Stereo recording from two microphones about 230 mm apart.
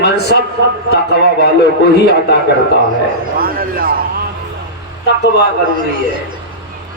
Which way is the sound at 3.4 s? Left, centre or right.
Right.